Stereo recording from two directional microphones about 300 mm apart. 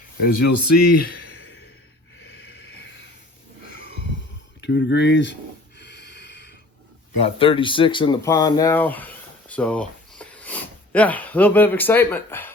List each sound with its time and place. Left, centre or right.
0.3 s speech: left
2.2 s a sound: left
4.6 s gasp: left
7.2 s speech: centre